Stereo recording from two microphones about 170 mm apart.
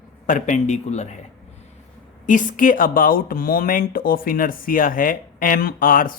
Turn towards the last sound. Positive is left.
turn(degrees=55)  # may be behind; listen again after turning